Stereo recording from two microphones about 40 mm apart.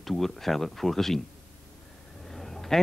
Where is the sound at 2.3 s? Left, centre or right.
Centre.